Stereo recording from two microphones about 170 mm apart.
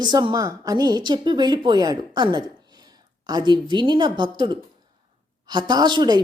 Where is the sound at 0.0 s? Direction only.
25° right (ahead or behind).